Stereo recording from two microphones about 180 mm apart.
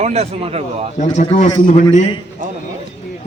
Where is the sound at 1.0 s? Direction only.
40° left (ahead or behind).